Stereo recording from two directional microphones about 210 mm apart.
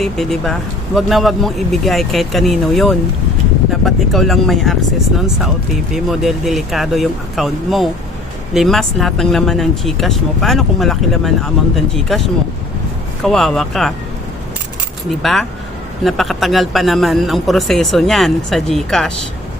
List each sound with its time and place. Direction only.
0.0 s speech: centre (ahead or behind)
15.2 s speech: centre (ahead or behind)